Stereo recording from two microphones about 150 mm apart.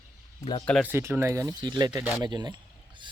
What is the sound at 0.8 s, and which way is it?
Speech, 15° right (ahead or behind).